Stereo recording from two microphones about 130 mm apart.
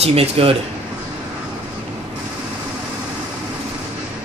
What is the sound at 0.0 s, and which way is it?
Speech, 50° right (ahead or behind).